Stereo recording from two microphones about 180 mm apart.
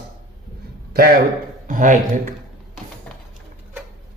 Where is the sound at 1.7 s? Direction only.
45° right (ahead or behind).